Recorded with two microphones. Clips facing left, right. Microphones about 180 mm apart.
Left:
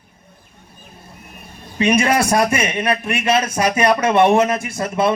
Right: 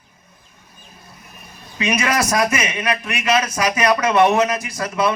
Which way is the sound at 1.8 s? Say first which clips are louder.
Left 4 dB; 30° left (ahead or behind).